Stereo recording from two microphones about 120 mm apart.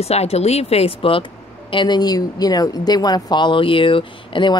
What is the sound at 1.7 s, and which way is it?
A woman's voice, 40° left (ahead or behind).